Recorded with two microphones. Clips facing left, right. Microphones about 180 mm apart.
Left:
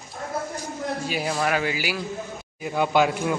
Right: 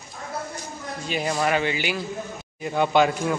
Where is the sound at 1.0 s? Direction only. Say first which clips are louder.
Right 3 dB; 5° left (ahead or behind).